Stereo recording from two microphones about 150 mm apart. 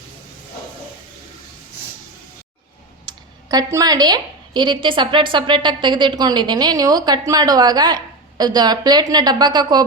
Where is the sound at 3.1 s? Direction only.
25° right (ahead or behind).